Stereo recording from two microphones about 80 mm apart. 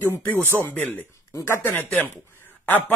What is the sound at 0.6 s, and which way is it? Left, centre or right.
Speech, left.